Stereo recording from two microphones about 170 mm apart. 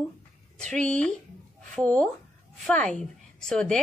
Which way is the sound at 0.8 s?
5° left (ahead or behind).